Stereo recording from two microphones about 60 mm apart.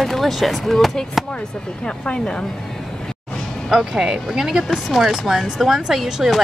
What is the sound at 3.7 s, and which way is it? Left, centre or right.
Speech, centre.